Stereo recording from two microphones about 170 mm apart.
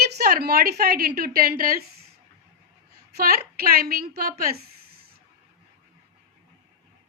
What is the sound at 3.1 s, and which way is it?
A woman's voice, 60° right (ahead or behind).